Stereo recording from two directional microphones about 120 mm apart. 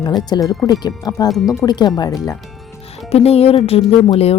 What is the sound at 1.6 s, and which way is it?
Speech, 35° left (ahead or behind).